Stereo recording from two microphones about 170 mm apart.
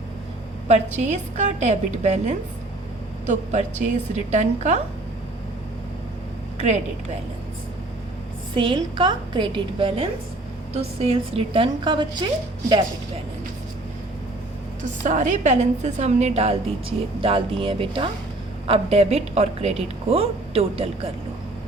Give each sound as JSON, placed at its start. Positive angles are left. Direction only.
{"t": 0.7, "sound": "a woman's voice", "side_deg": -45}
{"t": 6.6, "sound": "a woman's voice", "side_deg": -40}
{"t": 8.5, "sound": "a woman's voice", "side_deg": -30}
{"t": 14.8, "sound": "a woman's voice", "side_deg": -45}